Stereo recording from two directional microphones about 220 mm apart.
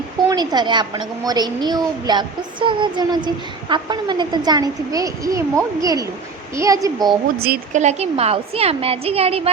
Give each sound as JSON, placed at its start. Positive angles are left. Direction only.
{"t": 0.3, "sound": "a child's voice", "side_deg": -20}
{"t": 7.4, "sound": "a child's voice", "side_deg": -40}